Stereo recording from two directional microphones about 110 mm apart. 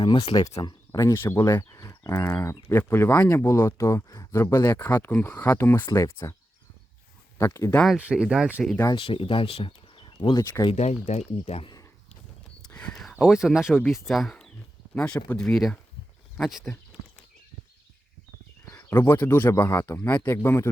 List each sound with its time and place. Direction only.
0.0 s speech: 45° left (ahead or behind)
0.5 s speech: 30° left (ahead or behind)
1.5 s a sound: 25° left (ahead or behind)
2.3 s speech: 25° left (ahead or behind)
7.3 s speech: 25° left (ahead or behind)
7.9 s speech: 10° right (ahead or behind)
8.9 s speech: 50° left (ahead or behind); by 10.7 s 35° left (ahead or behind)
10.8 s speech: 90° left
12.7 s speech: 5° left (ahead or behind)
18.8 s speech: 25° left (ahead or behind)